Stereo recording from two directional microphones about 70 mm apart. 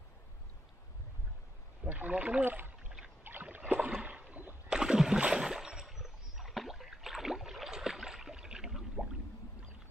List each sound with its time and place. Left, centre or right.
1.9 s speech: right
3.3 s rowboat: right
4.6 s splash: centre